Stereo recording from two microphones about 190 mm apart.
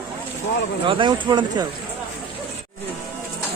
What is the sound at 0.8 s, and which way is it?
Speech, 25° right (ahead or behind).